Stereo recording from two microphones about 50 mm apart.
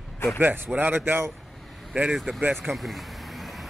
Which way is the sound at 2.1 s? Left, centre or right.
Centre.